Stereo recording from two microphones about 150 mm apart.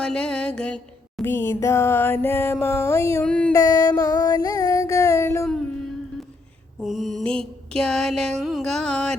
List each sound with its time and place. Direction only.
0.0 s music: 5° left (ahead or behind)
3.2 s music: 10° left (ahead or behind)
3.5 s music: 25° left (ahead or behind)
6.8 s mantra: centre (ahead or behind)